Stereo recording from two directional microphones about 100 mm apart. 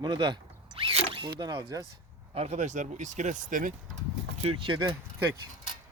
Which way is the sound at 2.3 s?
90° right.